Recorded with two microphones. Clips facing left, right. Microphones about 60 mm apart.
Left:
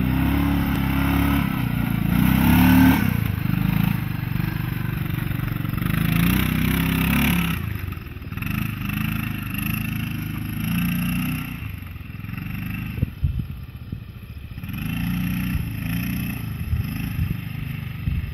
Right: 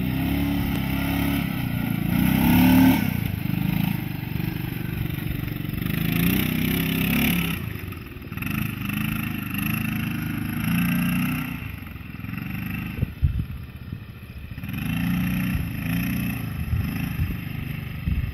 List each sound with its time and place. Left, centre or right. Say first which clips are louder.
0.0 s vehicle: left 3 dB; left
1.7 s vehicle: left 2 dB; centre
5.4 s vehicle: left 3 dB; left
5.9 s vehicle: left 1 dB; centre
8.4 s vehicle: left 1 dB; centre
12.4 s vehicle: even; centre
14.8 s vehicle: right 1 dB; centre